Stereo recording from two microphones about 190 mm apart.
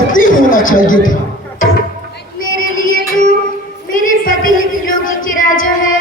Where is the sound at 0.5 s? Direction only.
45° left (ahead or behind).